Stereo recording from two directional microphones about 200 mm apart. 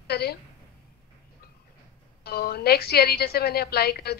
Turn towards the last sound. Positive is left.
turn(degrees=50)  # may be behind; listen again after turning